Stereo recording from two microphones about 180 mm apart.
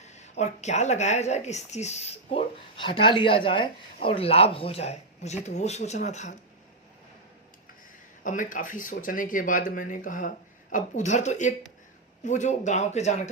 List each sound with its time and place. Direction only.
0.0 s a woman's voice: 40° left (ahead or behind)
8.2 s a woman's voice: 45° left (ahead or behind)